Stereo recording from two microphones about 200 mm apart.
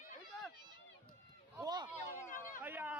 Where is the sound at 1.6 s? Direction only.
20° right (ahead or behind).